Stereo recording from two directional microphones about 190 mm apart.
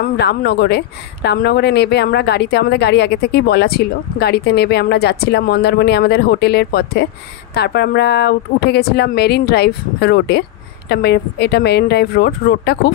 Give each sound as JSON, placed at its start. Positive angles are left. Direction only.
{"t": 0.0, "sound": "speech", "side_deg": 60}